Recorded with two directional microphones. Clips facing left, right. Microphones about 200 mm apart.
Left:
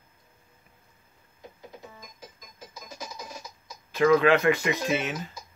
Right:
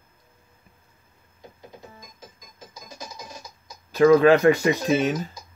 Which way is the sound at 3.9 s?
40° right (ahead or behind).